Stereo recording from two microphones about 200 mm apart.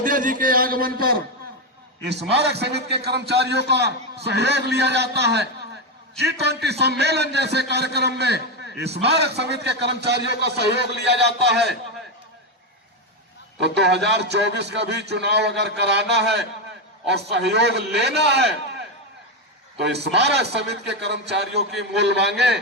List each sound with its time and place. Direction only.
0.0 s a man's voice: 45° right (ahead or behind)
2.3 s a man's voice: 55° right (ahead or behind)
13.6 s a man's voice: 55° right (ahead or behind)
19.8 s a man's voice: 60° right (ahead or behind)